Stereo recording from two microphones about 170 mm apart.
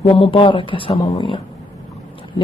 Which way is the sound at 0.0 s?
30° left (ahead or behind).